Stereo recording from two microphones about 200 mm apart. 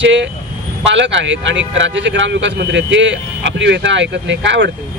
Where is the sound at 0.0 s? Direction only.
65° right (ahead or behind).